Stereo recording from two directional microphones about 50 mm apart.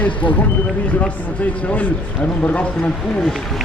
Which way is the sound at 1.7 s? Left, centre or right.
Left.